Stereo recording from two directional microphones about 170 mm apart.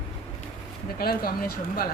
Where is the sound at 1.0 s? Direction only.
60° left (ahead or behind).